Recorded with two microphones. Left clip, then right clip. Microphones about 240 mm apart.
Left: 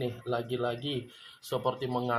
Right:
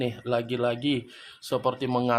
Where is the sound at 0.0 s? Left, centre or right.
Right.